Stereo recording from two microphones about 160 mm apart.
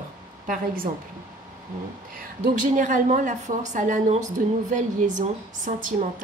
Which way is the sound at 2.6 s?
50° right (ahead or behind).